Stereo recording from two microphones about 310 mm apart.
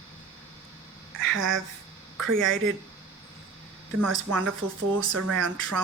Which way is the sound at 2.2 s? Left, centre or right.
Right.